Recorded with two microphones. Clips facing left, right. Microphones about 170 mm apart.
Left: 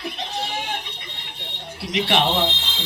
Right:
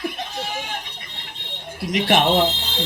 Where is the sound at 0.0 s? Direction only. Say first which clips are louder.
Right 1 dB; 50° right (ahead or behind).